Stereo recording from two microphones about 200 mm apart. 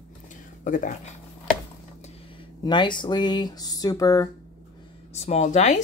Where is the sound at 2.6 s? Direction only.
25° left (ahead or behind).